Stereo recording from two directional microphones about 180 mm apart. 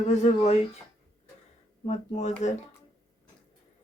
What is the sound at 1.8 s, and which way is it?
Speech, 40° left (ahead or behind).